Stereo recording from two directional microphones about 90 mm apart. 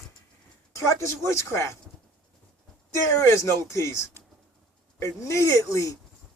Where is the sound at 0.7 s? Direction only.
30° left (ahead or behind).